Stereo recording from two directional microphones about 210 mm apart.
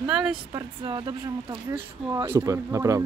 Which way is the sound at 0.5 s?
20° right (ahead or behind).